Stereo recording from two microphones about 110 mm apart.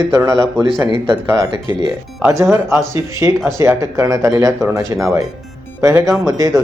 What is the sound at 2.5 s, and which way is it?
A man's voice, 25° right (ahead or behind).